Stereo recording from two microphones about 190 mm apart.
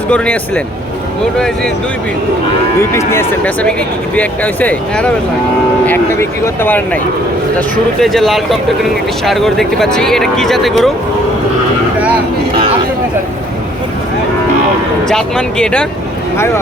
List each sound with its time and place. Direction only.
0.1 s speech: 5° left (ahead or behind)
3.1 s speech: 10° left (ahead or behind)
6.4 s speech: 10° left (ahead or behind)
8.0 s speech: centre (ahead or behind)
15.0 s speech: 5° left (ahead or behind)